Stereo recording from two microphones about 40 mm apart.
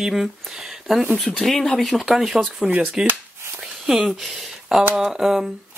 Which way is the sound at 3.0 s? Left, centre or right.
Right.